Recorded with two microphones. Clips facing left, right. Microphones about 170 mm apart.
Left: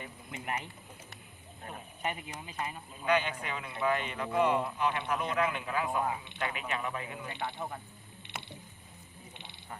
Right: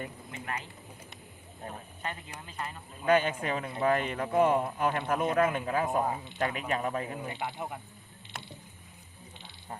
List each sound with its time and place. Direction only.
0.3 s a sound: 15° left (ahead or behind)
2.0 s speech: 15° left (ahead or behind)
3.1 s a man's voice: 45° right (ahead or behind)
7.3 s speech: 15° right (ahead or behind)
8.2 s rowboat: 60° left (ahead or behind)